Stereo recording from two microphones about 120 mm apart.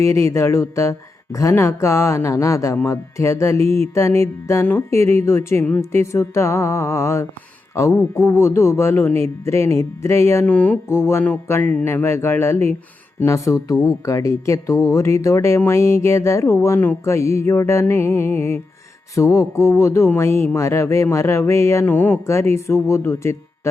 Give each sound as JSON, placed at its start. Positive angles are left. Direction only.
{"t": 0.0, "sound": "speech", "side_deg": 25}